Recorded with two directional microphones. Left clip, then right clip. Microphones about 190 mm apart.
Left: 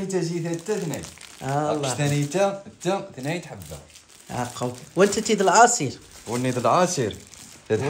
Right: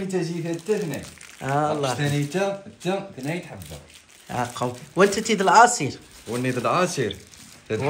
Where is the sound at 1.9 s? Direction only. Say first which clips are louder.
Left 2 dB; 25° left (ahead or behind).